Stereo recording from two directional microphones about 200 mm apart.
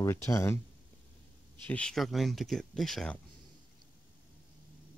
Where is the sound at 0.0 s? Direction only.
15° left (ahead or behind).